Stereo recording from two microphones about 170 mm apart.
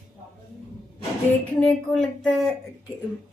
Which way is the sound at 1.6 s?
5° left (ahead or behind).